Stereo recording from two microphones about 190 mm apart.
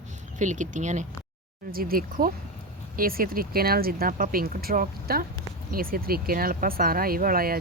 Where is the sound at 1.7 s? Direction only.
50° right (ahead or behind).